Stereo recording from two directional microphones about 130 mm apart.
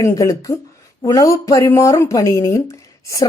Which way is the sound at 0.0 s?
25° left (ahead or behind).